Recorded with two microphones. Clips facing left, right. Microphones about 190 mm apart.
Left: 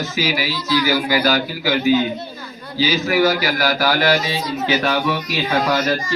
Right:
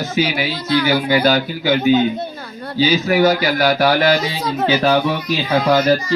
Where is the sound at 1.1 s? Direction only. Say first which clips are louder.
Right 3 dB; 30° right (ahead or behind).